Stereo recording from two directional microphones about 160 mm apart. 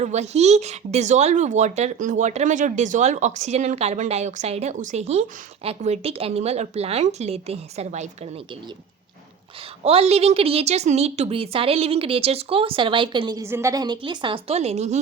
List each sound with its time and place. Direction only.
0.0 s a woman's voice: 45° right (ahead or behind)
9.8 s a woman's voice: 40° right (ahead or behind)